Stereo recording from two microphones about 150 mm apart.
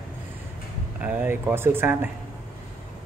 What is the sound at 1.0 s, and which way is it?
A man's voice, 10° right (ahead or behind).